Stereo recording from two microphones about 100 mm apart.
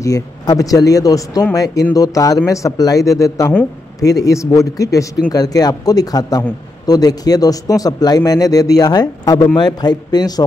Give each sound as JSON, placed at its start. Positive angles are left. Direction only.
{"t": 0.0, "sound": "speech", "side_deg": 35}